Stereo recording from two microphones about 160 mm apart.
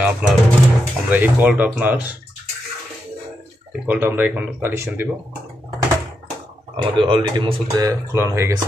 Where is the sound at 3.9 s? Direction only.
10° right (ahead or behind).